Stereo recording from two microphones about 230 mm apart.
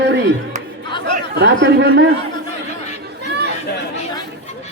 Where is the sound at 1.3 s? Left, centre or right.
Right.